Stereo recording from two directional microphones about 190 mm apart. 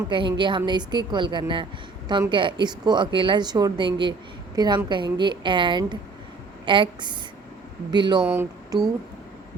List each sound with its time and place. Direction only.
0.1 s a woman's voice: 25° right (ahead or behind)
8.2 s speech: 10° right (ahead or behind)